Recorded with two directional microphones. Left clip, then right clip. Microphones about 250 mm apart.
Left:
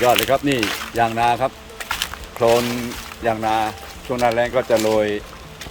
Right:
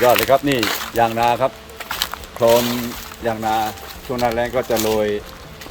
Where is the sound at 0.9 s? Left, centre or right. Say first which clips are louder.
Right 1 dB; centre.